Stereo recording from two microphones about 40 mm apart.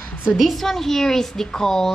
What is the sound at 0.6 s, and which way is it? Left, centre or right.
A child's voice, centre.